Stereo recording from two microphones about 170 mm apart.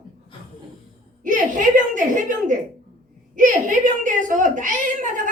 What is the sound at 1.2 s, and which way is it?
Speech, 50° right (ahead or behind).